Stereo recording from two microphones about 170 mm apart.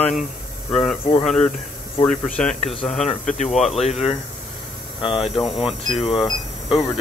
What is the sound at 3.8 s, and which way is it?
Speech, 40° left (ahead or behind).